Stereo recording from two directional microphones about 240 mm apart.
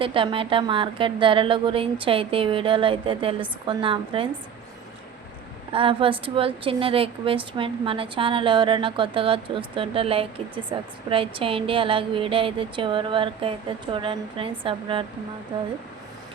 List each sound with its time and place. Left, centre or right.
0.0 s a woman's voice: right
5.7 s a woman's voice: right